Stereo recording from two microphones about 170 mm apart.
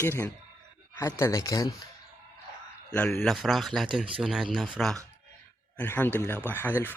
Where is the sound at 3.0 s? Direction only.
5° left (ahead or behind).